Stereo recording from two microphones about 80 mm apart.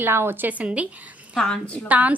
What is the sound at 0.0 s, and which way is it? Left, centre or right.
Speech, right.